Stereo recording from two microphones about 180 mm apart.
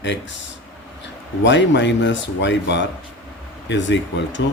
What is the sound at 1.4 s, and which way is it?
Speech, 85° left.